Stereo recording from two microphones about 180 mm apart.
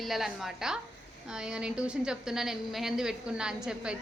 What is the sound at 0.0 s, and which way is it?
A woman's voice, centre (ahead or behind).